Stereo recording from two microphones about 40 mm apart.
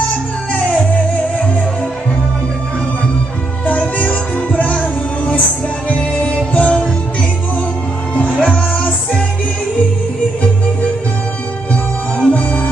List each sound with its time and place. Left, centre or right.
0.5 s music: left
3.6 s music: left
8.1 s music: left
11.7 s music: left